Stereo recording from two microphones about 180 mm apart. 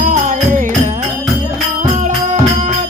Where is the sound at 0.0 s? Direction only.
45° right (ahead or behind).